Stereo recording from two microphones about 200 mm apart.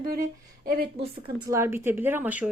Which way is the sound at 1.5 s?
15° right (ahead or behind).